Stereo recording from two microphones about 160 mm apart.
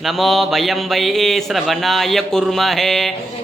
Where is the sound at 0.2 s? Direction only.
Centre (ahead or behind).